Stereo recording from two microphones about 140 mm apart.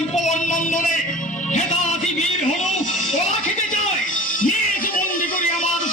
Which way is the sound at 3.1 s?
60° left (ahead or behind).